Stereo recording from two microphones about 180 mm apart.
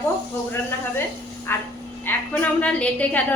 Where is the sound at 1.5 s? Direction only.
10° left (ahead or behind).